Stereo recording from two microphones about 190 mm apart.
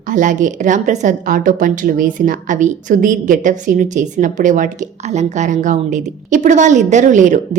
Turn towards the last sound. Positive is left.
turn(degrees=-40)  # may be behind; listen again after turning